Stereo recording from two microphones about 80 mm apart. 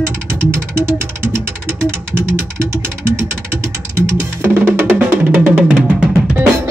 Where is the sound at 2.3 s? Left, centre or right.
Right.